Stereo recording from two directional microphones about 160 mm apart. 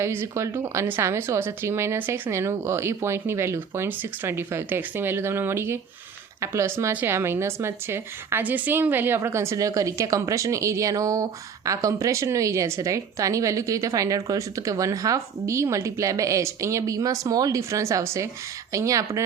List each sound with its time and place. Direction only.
0.0 s speech: 15° right (ahead or behind)